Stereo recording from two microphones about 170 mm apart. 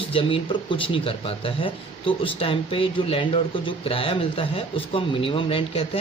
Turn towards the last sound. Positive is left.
turn(degrees=30)  # may be behind; listen again after turning